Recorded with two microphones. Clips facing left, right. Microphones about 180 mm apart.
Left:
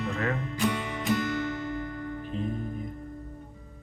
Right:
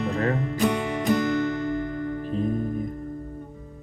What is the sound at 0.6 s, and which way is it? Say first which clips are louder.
Music: right 5 dB; 50° right (ahead or behind).